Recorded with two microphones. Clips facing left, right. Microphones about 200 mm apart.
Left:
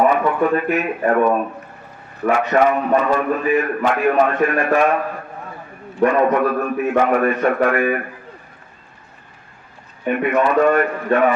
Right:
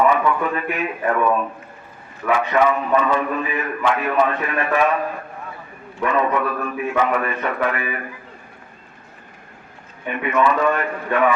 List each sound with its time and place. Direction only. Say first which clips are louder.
0.0 s a man's voice: left 2 dB; 45° left (ahead or behind)
6.0 s a man's voice: left 5 dB; 50° left (ahead or behind)
10.4 s a man's voice: left 3 dB; 50° left (ahead or behind)